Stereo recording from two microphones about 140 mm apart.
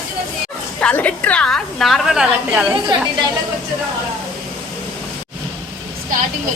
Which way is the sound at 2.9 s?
35° right (ahead or behind).